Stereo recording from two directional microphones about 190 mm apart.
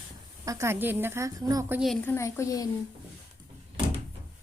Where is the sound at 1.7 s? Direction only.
Centre (ahead or behind).